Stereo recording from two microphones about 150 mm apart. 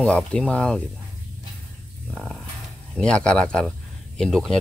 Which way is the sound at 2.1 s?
Centre (ahead or behind).